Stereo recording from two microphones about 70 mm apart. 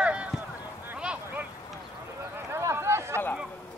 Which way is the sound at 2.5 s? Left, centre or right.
Right.